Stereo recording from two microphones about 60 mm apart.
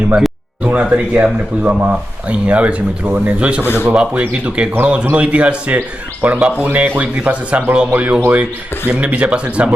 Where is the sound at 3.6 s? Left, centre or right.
Left.